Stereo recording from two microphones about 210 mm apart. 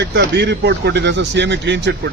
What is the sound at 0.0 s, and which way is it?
Speech, 55° right (ahead or behind).